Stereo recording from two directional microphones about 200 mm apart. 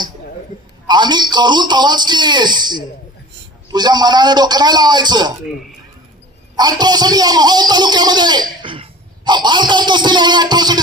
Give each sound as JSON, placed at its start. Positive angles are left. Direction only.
{"t": 0.8, "sound": "a man's voice", "side_deg": -20}
{"t": 6.5, "sound": "a man's voice", "side_deg": -20}